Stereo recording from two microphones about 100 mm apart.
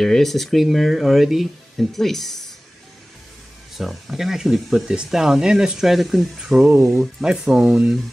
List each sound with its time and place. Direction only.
0.0 s speech: 5° left (ahead or behind)
3.7 s speech: centre (ahead or behind)
6.6 s speech: 25° right (ahead or behind)
6.9 s speech: 5° right (ahead or behind)